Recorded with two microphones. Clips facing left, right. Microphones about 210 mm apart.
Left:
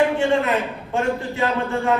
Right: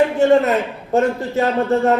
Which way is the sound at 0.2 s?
40° right (ahead or behind).